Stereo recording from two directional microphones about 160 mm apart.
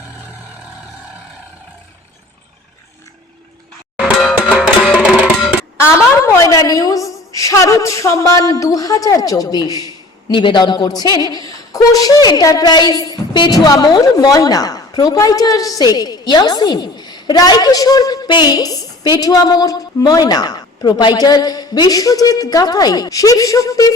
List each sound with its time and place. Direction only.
4.0 s music: centre (ahead or behind)
5.7 s a woman's voice: 15° left (ahead or behind)